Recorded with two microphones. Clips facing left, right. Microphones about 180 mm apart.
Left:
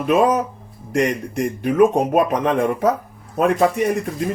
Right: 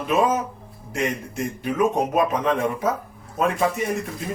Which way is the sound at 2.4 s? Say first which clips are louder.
Left 4 dB; 65° left (ahead or behind).